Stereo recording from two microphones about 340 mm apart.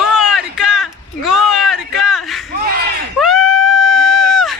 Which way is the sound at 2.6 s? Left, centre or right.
Right.